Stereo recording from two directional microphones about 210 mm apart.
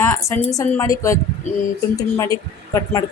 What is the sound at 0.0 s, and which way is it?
A woman's voice, 15° left (ahead or behind).